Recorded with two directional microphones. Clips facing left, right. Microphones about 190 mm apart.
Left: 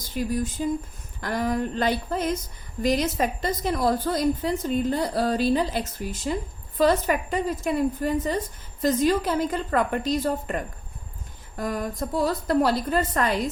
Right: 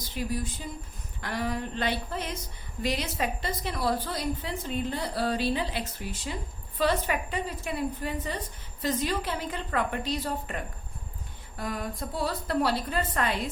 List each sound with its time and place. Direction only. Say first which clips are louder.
0.1 s a woman's voice: left 6 dB; 45° left (ahead or behind)